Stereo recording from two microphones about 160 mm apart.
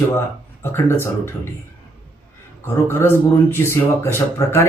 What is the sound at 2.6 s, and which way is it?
Speech, 15° left (ahead or behind).